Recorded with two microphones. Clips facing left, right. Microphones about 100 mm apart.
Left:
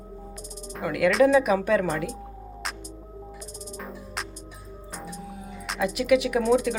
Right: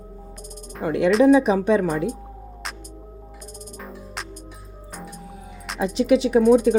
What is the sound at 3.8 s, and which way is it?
Music, centre (ahead or behind).